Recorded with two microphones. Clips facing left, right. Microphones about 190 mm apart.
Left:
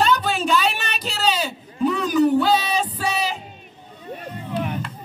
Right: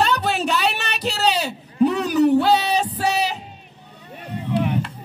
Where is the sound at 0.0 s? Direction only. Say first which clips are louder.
Even; 70° right (ahead or behind).